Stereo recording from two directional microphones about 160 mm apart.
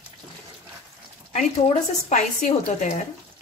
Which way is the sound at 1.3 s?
45° left (ahead or behind).